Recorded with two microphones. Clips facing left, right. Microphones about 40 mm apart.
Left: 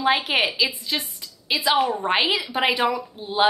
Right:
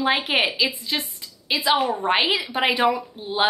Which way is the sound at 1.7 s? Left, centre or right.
Centre.